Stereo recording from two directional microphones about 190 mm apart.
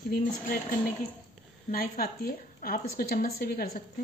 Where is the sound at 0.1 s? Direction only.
45° left (ahead or behind).